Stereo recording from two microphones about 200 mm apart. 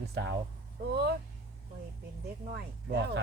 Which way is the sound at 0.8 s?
55° right (ahead or behind).